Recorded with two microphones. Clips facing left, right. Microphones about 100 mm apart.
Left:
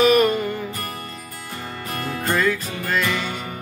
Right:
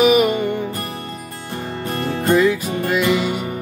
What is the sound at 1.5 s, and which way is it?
Music, 30° right (ahead or behind).